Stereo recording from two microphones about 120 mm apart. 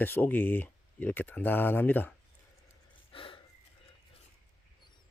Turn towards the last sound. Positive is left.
turn(degrees=45)  # may be behind; listen again after turning